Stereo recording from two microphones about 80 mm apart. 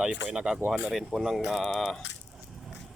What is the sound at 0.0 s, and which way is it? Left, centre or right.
Speech, centre.